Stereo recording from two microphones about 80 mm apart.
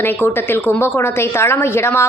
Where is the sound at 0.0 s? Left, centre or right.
Left.